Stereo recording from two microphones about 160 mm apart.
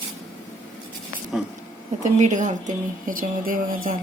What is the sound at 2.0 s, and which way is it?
Speech, 50° right (ahead or behind).